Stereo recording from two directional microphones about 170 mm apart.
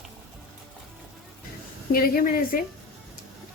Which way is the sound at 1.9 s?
60° left (ahead or behind).